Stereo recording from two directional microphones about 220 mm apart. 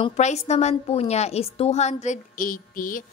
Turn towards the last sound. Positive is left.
turn(degrees=40)  # may be behind; listen again after turning